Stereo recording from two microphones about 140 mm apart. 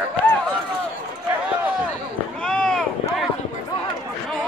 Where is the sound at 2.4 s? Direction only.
5° left (ahead or behind).